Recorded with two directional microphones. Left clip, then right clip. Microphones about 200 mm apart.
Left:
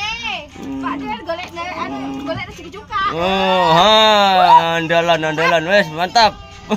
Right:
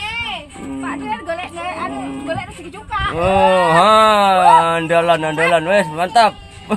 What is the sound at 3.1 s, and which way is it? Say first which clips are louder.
Speech: right 4 dB; centre (ahead or behind).